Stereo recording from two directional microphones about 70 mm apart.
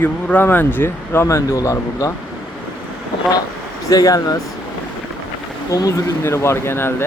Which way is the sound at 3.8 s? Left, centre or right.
Left.